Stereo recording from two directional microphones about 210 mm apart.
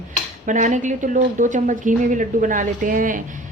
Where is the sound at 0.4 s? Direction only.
35° right (ahead or behind).